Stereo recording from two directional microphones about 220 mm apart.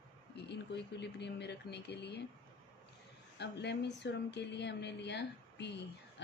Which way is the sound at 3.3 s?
50° left (ahead or behind).